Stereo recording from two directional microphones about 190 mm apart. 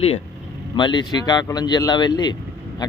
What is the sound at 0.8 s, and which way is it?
Speech, 25° left (ahead or behind).